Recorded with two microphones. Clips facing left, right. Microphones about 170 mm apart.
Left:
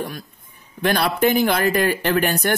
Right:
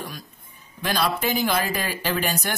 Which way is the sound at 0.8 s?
60° left (ahead or behind).